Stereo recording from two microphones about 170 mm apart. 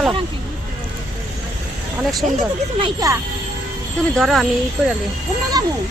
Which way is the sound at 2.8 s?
20° right (ahead or behind).